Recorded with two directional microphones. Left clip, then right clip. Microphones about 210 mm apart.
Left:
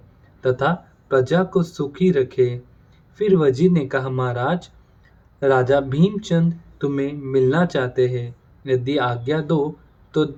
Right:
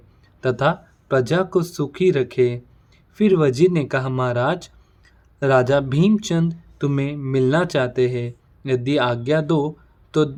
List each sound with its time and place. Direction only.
0.4 s speech: 55° right (ahead or behind)